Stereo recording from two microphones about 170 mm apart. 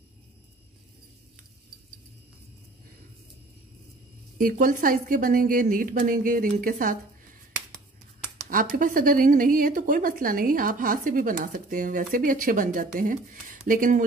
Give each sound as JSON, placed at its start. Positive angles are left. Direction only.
{"t": 4.4, "sound": "a woman's voice", "side_deg": -55}
{"t": 8.5, "sound": "a woman's voice", "side_deg": -50}